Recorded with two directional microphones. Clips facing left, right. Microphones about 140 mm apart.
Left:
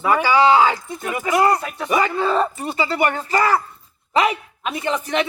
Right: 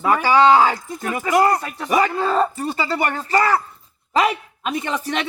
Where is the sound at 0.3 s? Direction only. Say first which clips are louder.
Right 2 dB; 40° right (ahead or behind).